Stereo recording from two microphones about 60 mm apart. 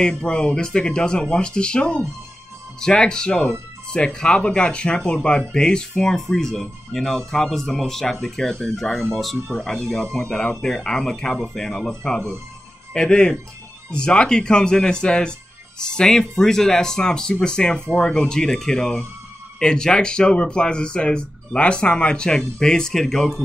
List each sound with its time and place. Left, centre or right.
0.2 s speech: centre